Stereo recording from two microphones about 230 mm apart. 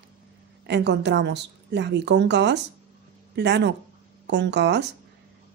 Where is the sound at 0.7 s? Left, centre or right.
Right.